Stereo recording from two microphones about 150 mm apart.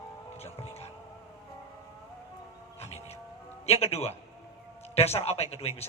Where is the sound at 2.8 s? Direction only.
45° left (ahead or behind).